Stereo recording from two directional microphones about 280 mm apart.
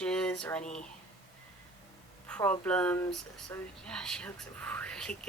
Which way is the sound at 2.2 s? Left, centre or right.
Centre.